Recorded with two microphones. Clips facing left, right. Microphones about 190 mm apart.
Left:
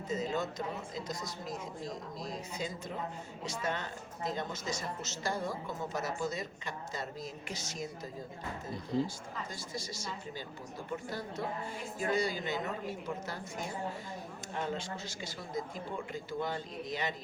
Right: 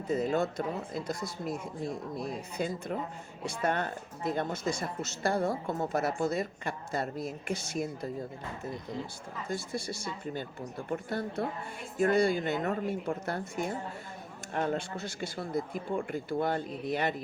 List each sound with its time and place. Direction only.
0.1 s speech: 60° right (ahead or behind)
8.9 s speech: 35° left (ahead or behind)
9.5 s speech: 60° right (ahead or behind)